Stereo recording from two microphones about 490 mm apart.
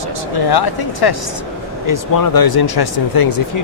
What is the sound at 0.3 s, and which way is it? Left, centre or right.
Speech, left.